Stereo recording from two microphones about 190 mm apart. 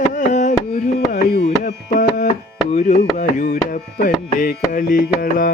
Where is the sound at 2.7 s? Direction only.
35° left (ahead or behind).